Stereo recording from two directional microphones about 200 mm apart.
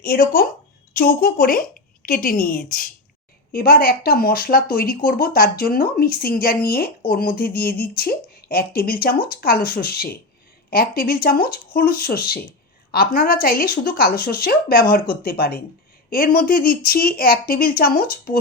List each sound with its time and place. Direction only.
0.0 s speech: 45° left (ahead or behind)